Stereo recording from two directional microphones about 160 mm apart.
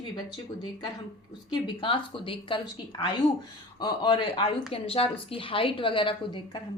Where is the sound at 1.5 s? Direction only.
30° left (ahead or behind).